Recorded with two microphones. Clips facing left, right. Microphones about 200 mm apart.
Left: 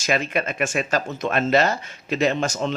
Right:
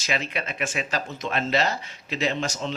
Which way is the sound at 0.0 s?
50° left (ahead or behind).